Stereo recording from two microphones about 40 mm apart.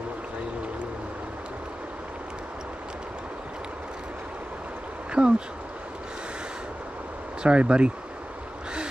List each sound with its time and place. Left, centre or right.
5.2 s speech: centre
7.4 s speech: right